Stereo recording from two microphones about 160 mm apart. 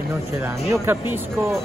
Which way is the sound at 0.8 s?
15° right (ahead or behind).